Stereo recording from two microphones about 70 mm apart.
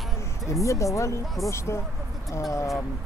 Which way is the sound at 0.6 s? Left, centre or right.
Left.